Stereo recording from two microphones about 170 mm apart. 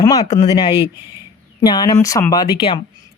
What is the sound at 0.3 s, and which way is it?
Speech, 25° left (ahead or behind).